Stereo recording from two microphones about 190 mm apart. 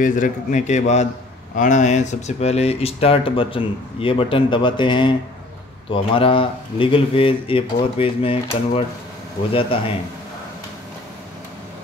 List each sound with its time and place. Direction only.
0.0 s a man's voice: 40° left (ahead or behind)